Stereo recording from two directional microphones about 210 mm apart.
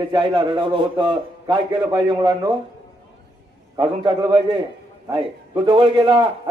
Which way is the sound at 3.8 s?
20° right (ahead or behind).